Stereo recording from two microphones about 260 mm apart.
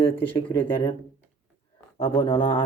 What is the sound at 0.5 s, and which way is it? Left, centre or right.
Speech, centre.